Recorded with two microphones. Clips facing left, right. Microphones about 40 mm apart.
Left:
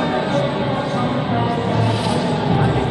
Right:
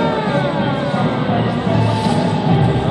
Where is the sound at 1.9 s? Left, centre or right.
Centre.